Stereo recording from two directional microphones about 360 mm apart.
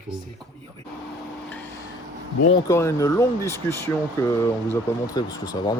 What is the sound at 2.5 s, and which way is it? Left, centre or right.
Speech, centre.